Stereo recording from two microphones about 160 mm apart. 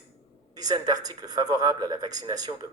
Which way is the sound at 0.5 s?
25° right (ahead or behind).